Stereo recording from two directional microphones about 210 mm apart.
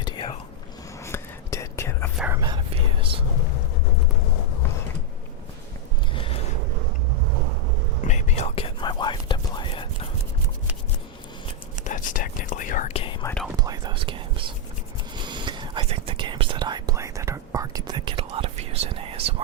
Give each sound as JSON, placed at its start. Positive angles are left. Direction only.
{"t": 0.0, "sound": "whispering", "side_deg": 20}
{"t": 2.1, "sound": "whispering", "side_deg": -5}
{"t": 2.4, "sound": "whispering", "side_deg": -25}
{"t": 6.1, "sound": "a sound", "side_deg": 25}
{"t": 8.0, "sound": "whispering", "side_deg": 30}
{"t": 11.9, "sound": "whispering", "side_deg": 40}
{"t": 13.2, "sound": "whispering", "side_deg": 5}
{"t": 13.6, "sound": "whispering", "side_deg": -20}